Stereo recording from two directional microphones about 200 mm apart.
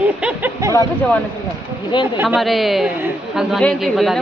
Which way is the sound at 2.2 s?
Centre (ahead or behind).